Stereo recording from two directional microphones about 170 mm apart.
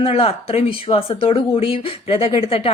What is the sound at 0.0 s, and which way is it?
Speech, 35° left (ahead or behind).